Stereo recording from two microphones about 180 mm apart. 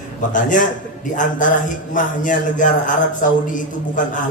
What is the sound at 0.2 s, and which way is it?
A man's voice, 45° left (ahead or behind).